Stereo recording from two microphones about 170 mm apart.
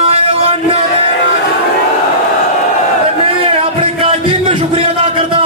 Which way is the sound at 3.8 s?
35° right (ahead or behind).